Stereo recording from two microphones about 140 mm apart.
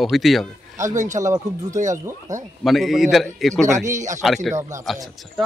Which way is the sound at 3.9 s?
60° right (ahead or behind).